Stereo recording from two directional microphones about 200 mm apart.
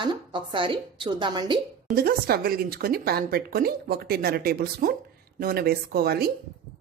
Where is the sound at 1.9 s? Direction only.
45° right (ahead or behind).